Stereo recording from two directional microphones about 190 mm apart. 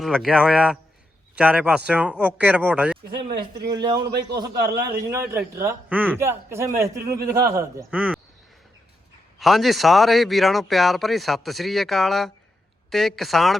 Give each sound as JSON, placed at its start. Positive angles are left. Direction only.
{"t": 0.0, "sound": "a man's voice", "side_deg": 0}
{"t": 3.6, "sound": "a man's voice", "side_deg": -20}
{"t": 4.0, "sound": "a man's voice", "side_deg": -60}
{"t": 5.1, "sound": "a man's voice", "side_deg": -15}
{"t": 7.9, "sound": "a man's voice", "side_deg": -5}
{"t": 9.4, "sound": "a man's voice", "side_deg": 0}